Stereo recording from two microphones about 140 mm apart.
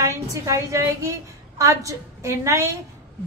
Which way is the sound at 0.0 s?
20° right (ahead or behind).